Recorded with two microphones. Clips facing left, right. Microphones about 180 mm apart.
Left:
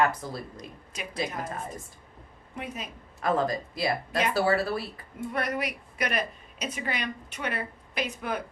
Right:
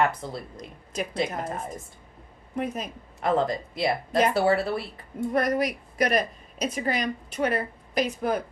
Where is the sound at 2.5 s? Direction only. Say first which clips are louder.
Right 7 dB; 45° right (ahead or behind).